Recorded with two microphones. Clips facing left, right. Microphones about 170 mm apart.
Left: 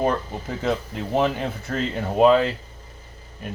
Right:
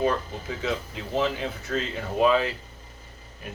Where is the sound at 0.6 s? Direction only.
55° left (ahead or behind).